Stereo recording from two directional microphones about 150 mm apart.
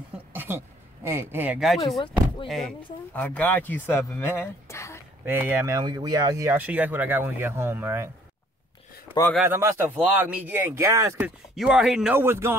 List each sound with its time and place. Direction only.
0.3 s a sound: 15° right (ahead or behind)
1.0 s speech: 15° right (ahead or behind)
1.9 s speech: centre (ahead or behind); by 5.0 s 20° left (ahead or behind)
5.2 s speech: 15° right (ahead or behind)
5.8 s speech: 25° right (ahead or behind)
6.5 s speech: 10° right (ahead or behind)
9.4 s speech: 15° right (ahead or behind)
11.2 s speech: 5° right (ahead or behind)
12.2 s speech: 15° right (ahead or behind)